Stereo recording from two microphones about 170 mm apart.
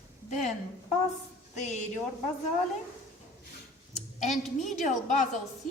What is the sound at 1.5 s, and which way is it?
Speech, 45° left (ahead or behind).